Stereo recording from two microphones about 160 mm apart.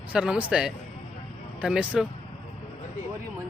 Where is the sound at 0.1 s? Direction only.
5° right (ahead or behind).